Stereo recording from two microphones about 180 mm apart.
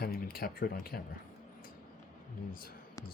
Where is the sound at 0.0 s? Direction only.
55° left (ahead or behind).